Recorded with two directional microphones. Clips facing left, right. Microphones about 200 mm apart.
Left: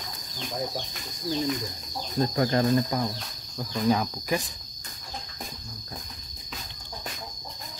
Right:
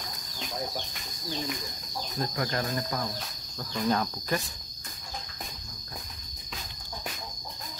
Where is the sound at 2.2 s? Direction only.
25° left (ahead or behind).